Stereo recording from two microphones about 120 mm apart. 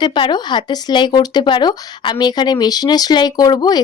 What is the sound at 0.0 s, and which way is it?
Speech, 40° left (ahead or behind).